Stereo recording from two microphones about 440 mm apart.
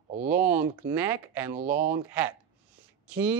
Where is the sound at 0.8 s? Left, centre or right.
Centre.